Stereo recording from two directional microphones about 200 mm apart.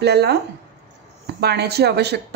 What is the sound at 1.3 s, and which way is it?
Speech, 55° right (ahead or behind).